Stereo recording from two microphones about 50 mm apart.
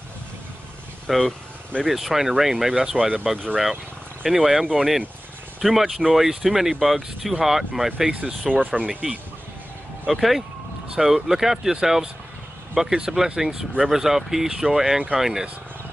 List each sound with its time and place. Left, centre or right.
1.0 s speech: centre
1.9 s speech: centre
8.1 s speech: right
10.0 s speech: centre